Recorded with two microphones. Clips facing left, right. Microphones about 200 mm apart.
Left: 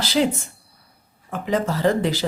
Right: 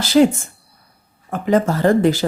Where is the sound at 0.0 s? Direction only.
50° right (ahead or behind).